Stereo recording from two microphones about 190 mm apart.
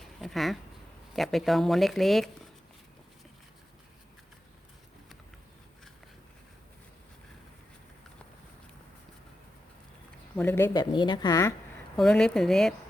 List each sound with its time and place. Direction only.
0.0 s a sound: centre (ahead or behind)
1.1 s speech: centre (ahead or behind)
10.3 s speech: 10° left (ahead or behind)
10.9 s a woman's voice: 25° left (ahead or behind)
11.9 s speech: 5° left (ahead or behind)